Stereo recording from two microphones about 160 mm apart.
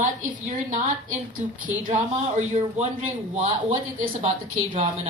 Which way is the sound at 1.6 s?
55° right (ahead or behind).